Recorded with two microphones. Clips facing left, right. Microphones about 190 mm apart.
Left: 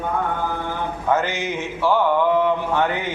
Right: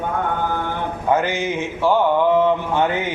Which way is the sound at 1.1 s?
15° right (ahead or behind).